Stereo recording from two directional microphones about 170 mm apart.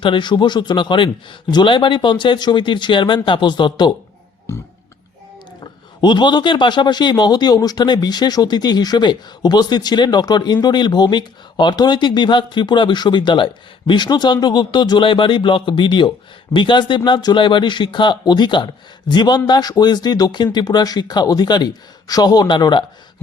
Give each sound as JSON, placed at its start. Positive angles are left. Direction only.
{"t": 0.0, "sound": "speech", "side_deg": 30}
{"t": 6.0, "sound": "speech", "side_deg": 25}